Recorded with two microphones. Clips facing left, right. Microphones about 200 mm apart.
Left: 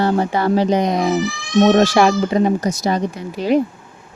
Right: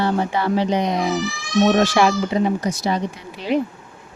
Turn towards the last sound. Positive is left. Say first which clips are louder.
# left 5 dB
turn(degrees=45)  # may be behind; listen again after turning